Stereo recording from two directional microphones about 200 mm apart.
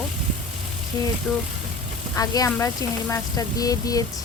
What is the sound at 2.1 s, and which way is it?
Speech, 20° left (ahead or behind).